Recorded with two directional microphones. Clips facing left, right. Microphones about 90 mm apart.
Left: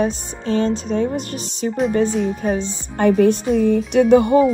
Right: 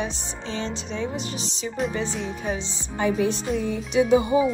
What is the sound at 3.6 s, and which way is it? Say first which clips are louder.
Music: left 5 dB; 50° left (ahead or behind).